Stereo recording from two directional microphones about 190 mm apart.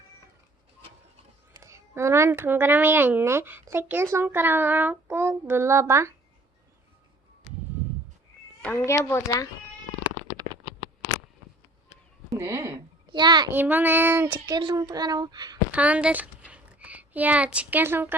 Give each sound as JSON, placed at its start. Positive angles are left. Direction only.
{"t": 1.5, "sound": "a woman's voice", "side_deg": -15}
{"t": 8.6, "sound": "a child's voice", "side_deg": 10}
{"t": 12.4, "sound": "a woman's voice", "side_deg": -15}
{"t": 13.5, "sound": "a woman's voice", "side_deg": -10}
{"t": 14.3, "sound": "a woman's voice", "side_deg": -25}
{"t": 15.7, "sound": "a woman's voice", "side_deg": -5}
{"t": 16.5, "sound": "a sound", "side_deg": -10}